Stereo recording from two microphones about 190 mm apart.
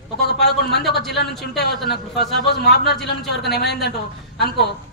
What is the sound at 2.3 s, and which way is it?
A man's voice, 60° left (ahead or behind).